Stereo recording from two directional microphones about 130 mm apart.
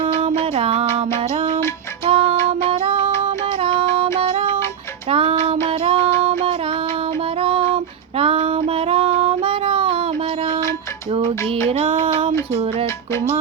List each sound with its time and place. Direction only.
0.5 s music: 50° right (ahead or behind)
2.0 s music: 45° right (ahead or behind)
8.2 s child singing: 45° right (ahead or behind)
11.7 s music: 50° right (ahead or behind)